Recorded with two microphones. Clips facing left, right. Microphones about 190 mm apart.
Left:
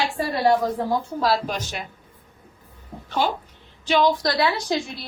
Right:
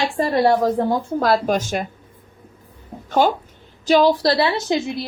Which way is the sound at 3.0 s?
45° right (ahead or behind).